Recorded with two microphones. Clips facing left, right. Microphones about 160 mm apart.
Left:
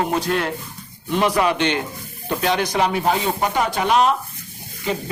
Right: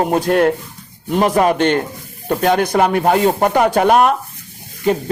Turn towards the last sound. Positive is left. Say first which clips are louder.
# right 8 dB
turn(degrees=-50)  # may be behind; listen again after turning